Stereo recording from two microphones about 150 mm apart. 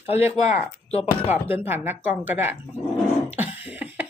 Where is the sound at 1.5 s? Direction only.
15° right (ahead or behind).